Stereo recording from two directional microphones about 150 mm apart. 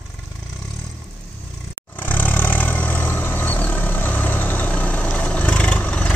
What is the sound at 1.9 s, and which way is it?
Vehicle, 10° left (ahead or behind).